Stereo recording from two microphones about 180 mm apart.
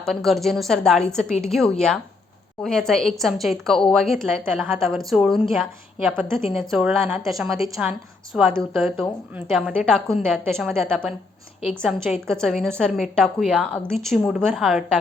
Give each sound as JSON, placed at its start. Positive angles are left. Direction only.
{"t": 0.0, "sound": "a woman's voice", "side_deg": 0}
{"t": 6.3, "sound": "speech", "side_deg": 30}
{"t": 6.6, "sound": "a woman's voice", "side_deg": -5}